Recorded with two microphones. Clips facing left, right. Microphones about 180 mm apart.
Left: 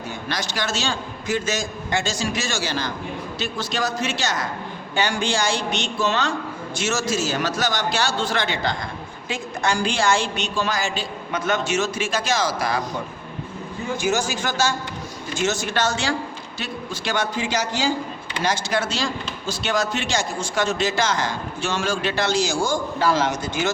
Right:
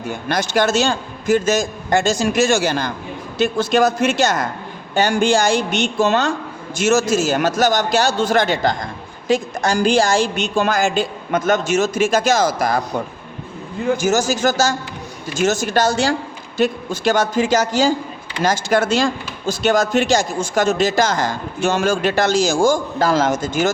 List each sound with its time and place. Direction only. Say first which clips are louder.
0.3 s a man's voice: right 10 dB; 50° right (ahead or behind)
14.0 s a man's voice: right 5 dB; 45° right (ahead or behind)